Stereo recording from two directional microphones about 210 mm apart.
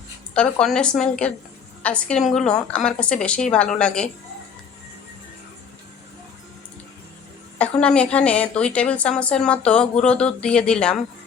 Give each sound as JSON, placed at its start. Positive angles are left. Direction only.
{"t": 0.3, "sound": "a woman's voice", "side_deg": 5}
{"t": 7.6, "sound": "a woman's voice", "side_deg": 5}